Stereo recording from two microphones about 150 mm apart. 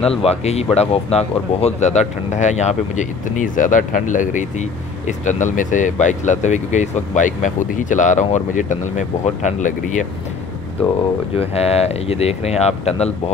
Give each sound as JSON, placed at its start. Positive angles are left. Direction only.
{"t": 0.1, "sound": "speech", "side_deg": 40}
{"t": 11.3, "sound": "speech", "side_deg": 45}